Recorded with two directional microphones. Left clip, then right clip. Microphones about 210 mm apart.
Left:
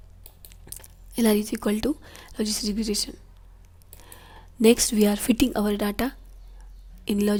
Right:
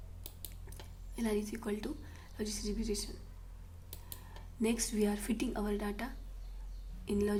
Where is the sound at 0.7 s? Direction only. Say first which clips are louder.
Left 9 dB; 50° left (ahead or behind).